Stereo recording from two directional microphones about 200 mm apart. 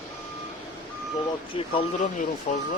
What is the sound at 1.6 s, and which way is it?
Speech, 30° left (ahead or behind).